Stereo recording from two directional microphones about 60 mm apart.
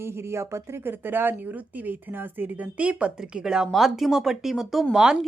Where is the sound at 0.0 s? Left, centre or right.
Right.